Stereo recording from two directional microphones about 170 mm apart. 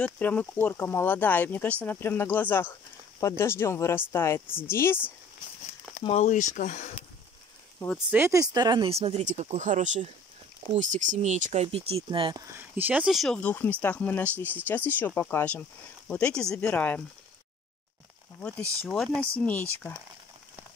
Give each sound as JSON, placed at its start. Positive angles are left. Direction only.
{"t": 0.0, "sound": "speech", "side_deg": 5}
{"t": 6.0, "sound": "speech", "side_deg": 40}
{"t": 8.1, "sound": "speech", "side_deg": -15}
{"t": 12.5, "sound": "speech", "side_deg": -10}
{"t": 18.4, "sound": "speech", "side_deg": 5}